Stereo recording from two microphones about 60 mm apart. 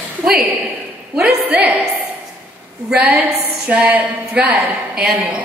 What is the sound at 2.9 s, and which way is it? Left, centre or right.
A woman's voice, right.